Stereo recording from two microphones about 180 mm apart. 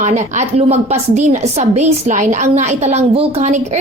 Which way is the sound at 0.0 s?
40° right (ahead or behind).